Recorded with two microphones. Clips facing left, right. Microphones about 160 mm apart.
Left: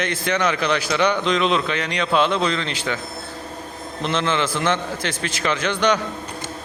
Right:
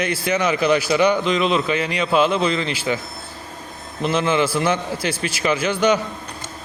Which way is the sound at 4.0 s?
10° right (ahead or behind).